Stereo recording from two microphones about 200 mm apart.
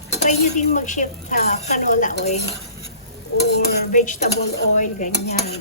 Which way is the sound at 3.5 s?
40° left (ahead or behind).